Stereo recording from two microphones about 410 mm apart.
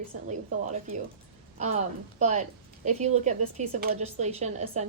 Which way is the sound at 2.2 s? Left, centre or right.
Centre.